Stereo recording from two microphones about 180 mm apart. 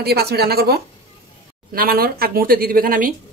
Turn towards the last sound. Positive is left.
turn(degrees=-50)  # may be behind; listen again after turning